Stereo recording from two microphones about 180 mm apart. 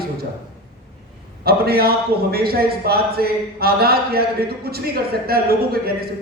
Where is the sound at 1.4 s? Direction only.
60° right (ahead or behind).